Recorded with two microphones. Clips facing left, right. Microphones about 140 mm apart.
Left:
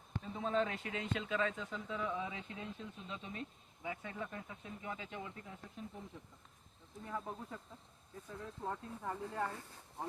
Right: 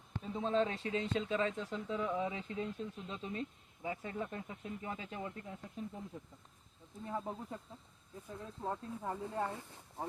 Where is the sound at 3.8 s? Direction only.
30° right (ahead or behind).